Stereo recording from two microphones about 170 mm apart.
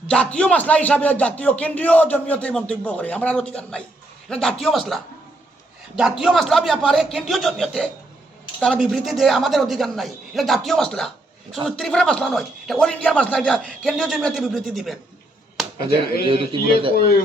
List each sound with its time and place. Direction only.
0.1 s a man's voice: 5° left (ahead or behind)
6.0 s speech: 5° right (ahead or behind)
16.2 s a man's voice: 30° right (ahead or behind)